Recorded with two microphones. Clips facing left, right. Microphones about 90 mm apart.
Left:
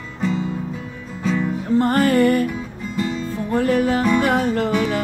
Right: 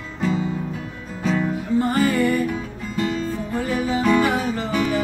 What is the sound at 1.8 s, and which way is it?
Music, 55° left (ahead or behind).